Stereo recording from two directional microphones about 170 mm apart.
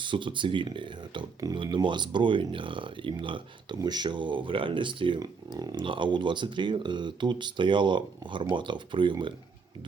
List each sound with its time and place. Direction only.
0.0 s speech: 30° right (ahead or behind)